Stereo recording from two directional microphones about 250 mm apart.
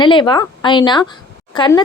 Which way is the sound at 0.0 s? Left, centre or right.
Centre.